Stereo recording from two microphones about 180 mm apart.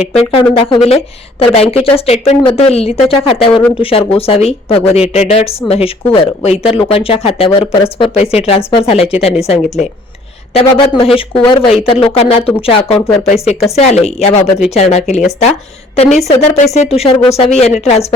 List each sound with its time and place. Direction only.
0.1 s speech: 35° left (ahead or behind)